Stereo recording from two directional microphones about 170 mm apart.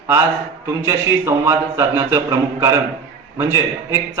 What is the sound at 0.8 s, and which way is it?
A man's voice, 15° right (ahead or behind).